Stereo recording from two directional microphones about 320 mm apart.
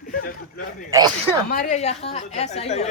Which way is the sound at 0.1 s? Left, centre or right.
Left.